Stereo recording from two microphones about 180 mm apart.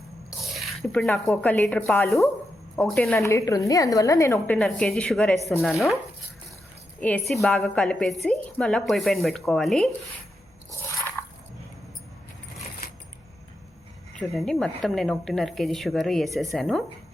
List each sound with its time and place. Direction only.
0.4 s a sound: centre (ahead or behind)
1.3 s a woman's voice: 10° left (ahead or behind)
7.0 s a woman's voice: 5° left (ahead or behind)
10.7 s biting: 15° left (ahead or behind)
14.1 s speech: centre (ahead or behind)